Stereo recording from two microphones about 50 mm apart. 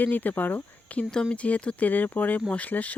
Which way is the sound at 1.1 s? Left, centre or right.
Centre.